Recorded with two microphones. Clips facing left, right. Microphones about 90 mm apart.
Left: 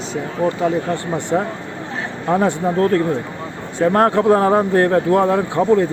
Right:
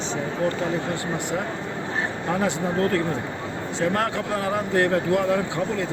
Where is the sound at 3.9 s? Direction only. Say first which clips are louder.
Left 11 dB; 40° left (ahead or behind).